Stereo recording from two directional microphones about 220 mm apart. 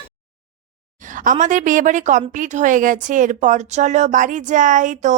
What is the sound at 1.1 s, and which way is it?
A woman's voice, 35° right (ahead or behind).